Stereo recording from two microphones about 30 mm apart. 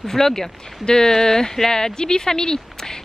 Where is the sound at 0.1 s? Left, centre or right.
Centre.